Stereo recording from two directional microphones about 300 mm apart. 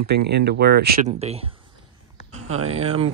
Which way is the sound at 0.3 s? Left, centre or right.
Right.